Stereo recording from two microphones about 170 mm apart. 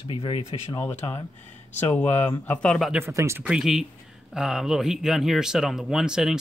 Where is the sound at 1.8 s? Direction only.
10° left (ahead or behind).